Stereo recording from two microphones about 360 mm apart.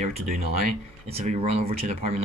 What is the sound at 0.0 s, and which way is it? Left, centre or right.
Speech, centre.